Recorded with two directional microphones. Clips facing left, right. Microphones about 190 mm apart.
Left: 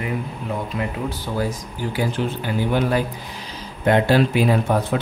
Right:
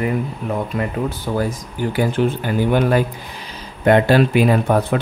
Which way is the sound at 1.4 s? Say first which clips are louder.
Right 2 dB; 55° right (ahead or behind).